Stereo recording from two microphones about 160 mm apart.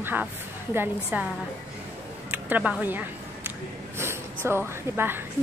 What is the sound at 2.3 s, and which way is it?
A woman's voice, 10° right (ahead or behind).